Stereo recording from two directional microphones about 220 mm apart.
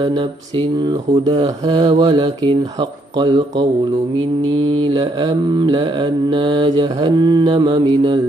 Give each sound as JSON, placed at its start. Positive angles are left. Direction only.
{"t": 0.8, "sound": "mantra", "side_deg": -20}
{"t": 4.9, "sound": "mantra", "side_deg": -20}